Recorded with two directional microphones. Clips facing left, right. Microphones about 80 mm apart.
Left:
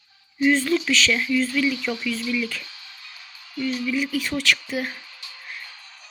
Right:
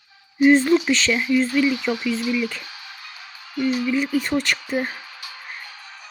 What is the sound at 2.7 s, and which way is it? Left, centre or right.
Music, right.